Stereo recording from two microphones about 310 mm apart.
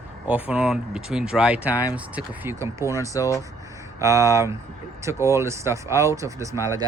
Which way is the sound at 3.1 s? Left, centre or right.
Centre.